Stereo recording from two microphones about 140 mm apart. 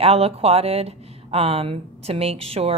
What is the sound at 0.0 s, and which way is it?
Speech, 45° right (ahead or behind).